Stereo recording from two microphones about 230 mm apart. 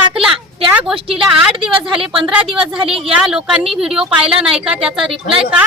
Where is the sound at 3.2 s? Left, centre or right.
Centre.